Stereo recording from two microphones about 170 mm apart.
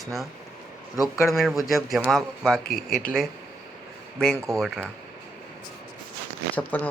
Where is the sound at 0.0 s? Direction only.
Centre (ahead or behind).